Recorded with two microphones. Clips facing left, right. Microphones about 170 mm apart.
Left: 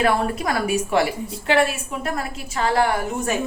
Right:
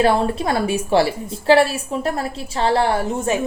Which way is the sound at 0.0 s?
30° right (ahead or behind).